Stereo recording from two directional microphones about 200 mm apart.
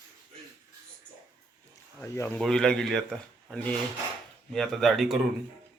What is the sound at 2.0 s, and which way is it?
Speech, 10° left (ahead or behind).